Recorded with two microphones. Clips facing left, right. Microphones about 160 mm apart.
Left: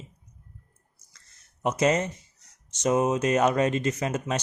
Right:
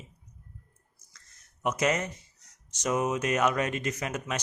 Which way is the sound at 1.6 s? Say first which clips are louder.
Left 4 dB; 30° left (ahead or behind).